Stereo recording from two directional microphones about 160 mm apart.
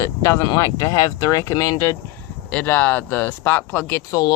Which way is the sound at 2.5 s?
10° left (ahead or behind).